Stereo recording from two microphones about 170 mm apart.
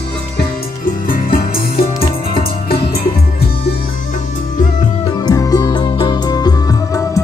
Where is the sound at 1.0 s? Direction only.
55° left (ahead or behind).